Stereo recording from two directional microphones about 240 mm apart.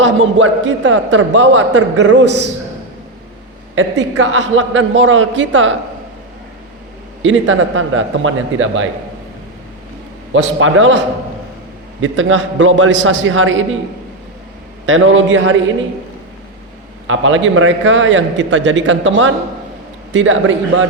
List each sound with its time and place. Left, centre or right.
0.0 s a man's voice: right
4.2 s a man's voice: right
7.2 s speech: right
10.3 s a man's voice: right
14.8 s speech: right
17.1 s a man's voice: right